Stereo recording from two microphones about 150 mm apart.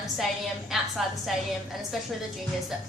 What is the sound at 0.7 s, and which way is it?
Speech, centre (ahead or behind).